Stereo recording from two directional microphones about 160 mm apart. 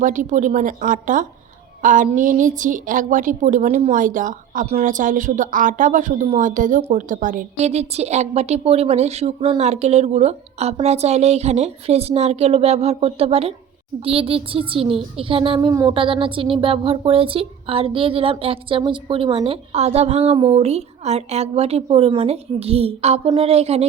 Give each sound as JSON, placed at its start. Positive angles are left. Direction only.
{"t": 0.0, "sound": "a woman's voice", "side_deg": -55}
{"t": 3.9, "sound": "a woman's voice", "side_deg": -55}
{"t": 4.6, "sound": "a woman's voice", "side_deg": -40}
{"t": 4.9, "sound": "a woman's voice", "side_deg": -55}
{"t": 15.7, "sound": "speech", "side_deg": -20}
{"t": 16.0, "sound": "a woman's voice", "side_deg": -35}